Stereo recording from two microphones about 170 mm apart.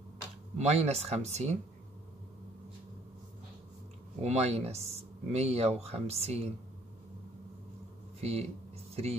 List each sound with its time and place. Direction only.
0.6 s speech: 40° right (ahead or behind)
4.2 s speech: 40° right (ahead or behind)
8.2 s speech: 35° right (ahead or behind)